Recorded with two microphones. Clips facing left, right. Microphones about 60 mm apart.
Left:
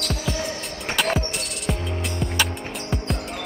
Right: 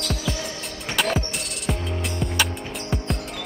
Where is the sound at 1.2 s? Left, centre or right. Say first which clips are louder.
Left 1 dB; centre.